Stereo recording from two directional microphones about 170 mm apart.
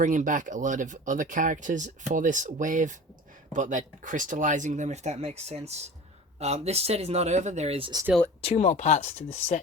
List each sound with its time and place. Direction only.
0.0 s speech: 45° right (ahead or behind); by 8.0 s 30° right (ahead or behind)
8.4 s speech: 40° left (ahead or behind)